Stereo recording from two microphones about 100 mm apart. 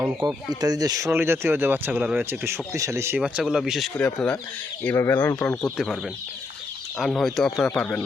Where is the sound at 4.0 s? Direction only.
10° left (ahead or behind).